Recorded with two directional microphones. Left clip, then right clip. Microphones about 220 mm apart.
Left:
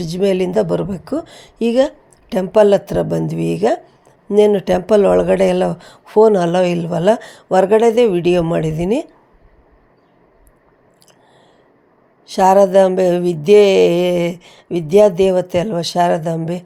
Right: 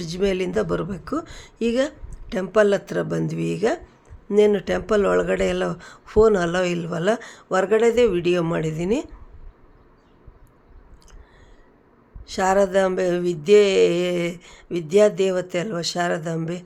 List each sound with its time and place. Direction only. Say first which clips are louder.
0.0 s speech: left 7 dB; 15° left (ahead or behind)
12.2 s speech: left 9 dB; 15° left (ahead or behind)